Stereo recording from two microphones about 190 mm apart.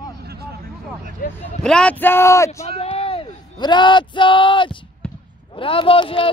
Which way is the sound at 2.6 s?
35° left (ahead or behind).